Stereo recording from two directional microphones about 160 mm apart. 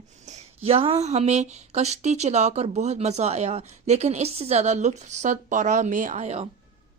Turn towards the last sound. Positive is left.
turn(degrees=-45)  # may be behind; listen again after turning